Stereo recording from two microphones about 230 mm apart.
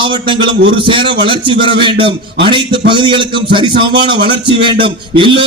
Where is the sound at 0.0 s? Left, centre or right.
Right.